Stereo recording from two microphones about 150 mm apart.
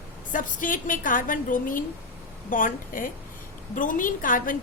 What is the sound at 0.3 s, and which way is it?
A woman's voice, 60° left (ahead or behind).